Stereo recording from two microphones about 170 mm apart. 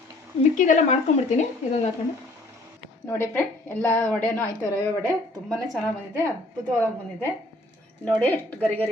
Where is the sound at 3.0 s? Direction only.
15° left (ahead or behind).